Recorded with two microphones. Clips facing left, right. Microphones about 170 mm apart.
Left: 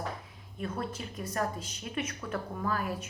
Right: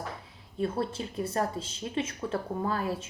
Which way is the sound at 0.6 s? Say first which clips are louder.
Right 6 dB; 30° right (ahead or behind).